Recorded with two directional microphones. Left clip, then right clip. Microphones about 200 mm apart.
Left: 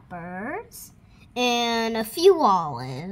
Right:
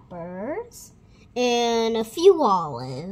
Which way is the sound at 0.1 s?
25° left (ahead or behind).